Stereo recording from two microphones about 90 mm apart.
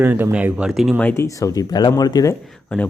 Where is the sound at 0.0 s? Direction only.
20° right (ahead or behind).